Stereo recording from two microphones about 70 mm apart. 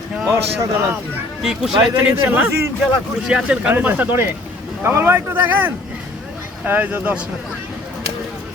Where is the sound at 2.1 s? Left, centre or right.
Right.